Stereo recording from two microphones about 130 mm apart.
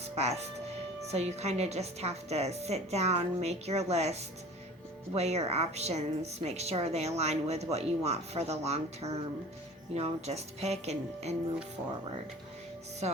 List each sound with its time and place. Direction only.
0.2 s a woman's voice: 55° right (ahead or behind)